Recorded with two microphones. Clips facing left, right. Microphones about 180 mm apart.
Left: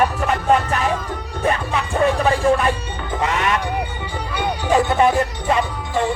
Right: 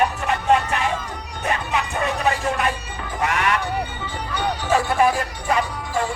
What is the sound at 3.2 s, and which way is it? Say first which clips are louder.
Speech: left 1 dB; 20° left (ahead or behind).